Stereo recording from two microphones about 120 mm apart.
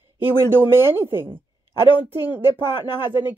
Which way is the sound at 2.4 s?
35° left (ahead or behind).